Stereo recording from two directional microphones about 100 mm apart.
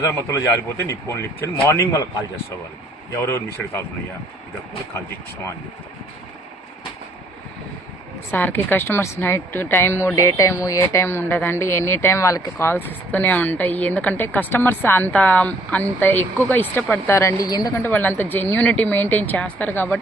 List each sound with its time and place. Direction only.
0.0 s a woman's voice: 30° left (ahead or behind)
3.2 s a woman's voice: 30° left (ahead or behind)
8.3 s a woman's voice: 20° left (ahead or behind); by 17.7 s 40° left (ahead or behind)
17.7 s a woman's voice: 20° left (ahead or behind)